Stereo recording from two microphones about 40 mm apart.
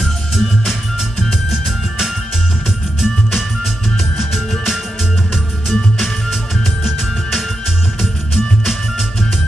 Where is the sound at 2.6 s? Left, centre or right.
Centre.